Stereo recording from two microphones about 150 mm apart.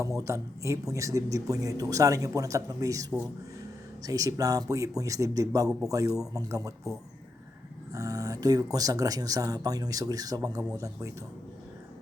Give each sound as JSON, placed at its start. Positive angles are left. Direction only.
{"t": 0.0, "sound": "a man's voice", "side_deg": -20}
{"t": 7.9, "sound": "a man's voice", "side_deg": -25}